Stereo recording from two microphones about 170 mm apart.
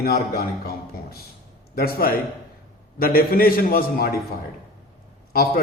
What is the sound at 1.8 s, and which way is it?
A man's voice, 60° left (ahead or behind).